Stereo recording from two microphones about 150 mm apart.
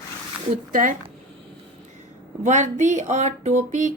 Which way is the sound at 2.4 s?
55° right (ahead or behind).